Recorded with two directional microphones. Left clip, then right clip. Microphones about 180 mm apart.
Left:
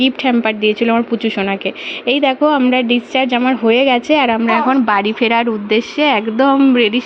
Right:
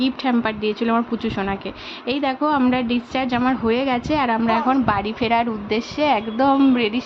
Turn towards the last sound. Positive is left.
turn(degrees=15)  # may be behind; listen again after turning